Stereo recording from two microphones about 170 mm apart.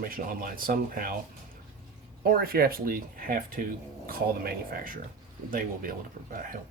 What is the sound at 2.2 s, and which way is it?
Speech, 60° right (ahead or behind).